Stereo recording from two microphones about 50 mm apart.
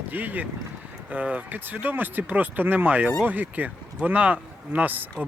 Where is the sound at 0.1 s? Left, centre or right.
Right.